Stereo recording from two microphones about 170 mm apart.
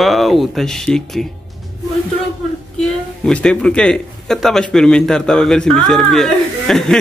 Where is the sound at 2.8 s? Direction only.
5° left (ahead or behind).